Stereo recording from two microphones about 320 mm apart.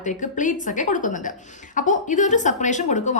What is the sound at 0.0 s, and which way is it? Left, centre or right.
A woman's voice, left.